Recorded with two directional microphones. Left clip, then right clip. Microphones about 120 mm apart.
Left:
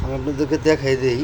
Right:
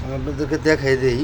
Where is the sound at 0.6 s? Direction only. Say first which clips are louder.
Right 2 dB; 15° right (ahead or behind).